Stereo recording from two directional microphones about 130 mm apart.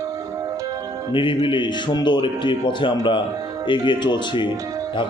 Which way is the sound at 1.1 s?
40° left (ahead or behind).